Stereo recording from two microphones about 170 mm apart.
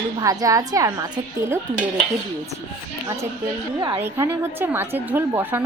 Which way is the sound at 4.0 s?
15° right (ahead or behind).